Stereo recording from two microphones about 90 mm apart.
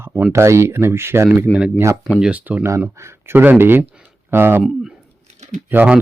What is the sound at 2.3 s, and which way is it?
Speech, 20° right (ahead or behind).